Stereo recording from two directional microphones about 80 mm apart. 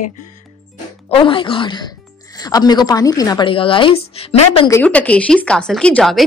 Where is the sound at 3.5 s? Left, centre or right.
Left.